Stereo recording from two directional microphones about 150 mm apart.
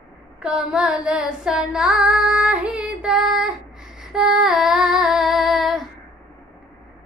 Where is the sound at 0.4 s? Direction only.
5° right (ahead or behind).